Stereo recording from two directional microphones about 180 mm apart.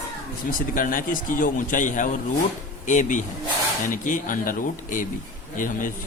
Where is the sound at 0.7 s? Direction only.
50° left (ahead or behind).